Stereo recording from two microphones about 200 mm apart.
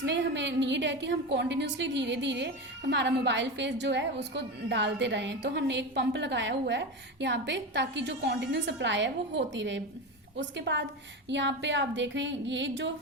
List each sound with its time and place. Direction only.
0.0 s a woman's voice: 60° right (ahead or behind)